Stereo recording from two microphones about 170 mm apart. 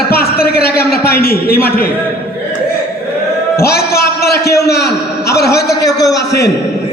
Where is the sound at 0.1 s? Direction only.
65° left (ahead or behind).